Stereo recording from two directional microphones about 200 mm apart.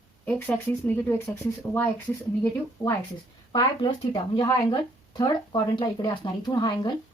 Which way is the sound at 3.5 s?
25° left (ahead or behind).